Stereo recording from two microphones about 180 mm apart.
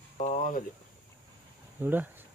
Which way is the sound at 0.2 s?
40° left (ahead or behind).